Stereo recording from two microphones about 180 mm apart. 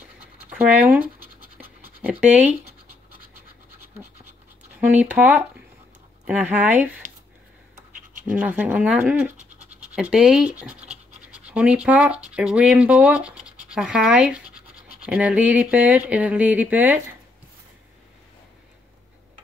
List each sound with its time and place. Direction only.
0.5 s scratch: 10° right (ahead or behind)
2.3 s speech: 10° right (ahead or behind)
5.1 s speech: 10° right (ahead or behind)
7.9 s scratch: 45° right (ahead or behind)
8.4 s speech: 10° right (ahead or behind)